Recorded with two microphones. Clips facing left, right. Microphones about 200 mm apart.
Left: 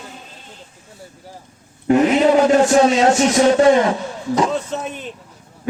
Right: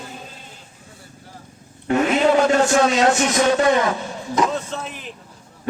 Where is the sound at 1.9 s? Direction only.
15° left (ahead or behind).